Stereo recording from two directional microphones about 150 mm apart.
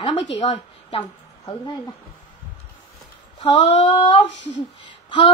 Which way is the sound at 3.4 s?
35° left (ahead or behind).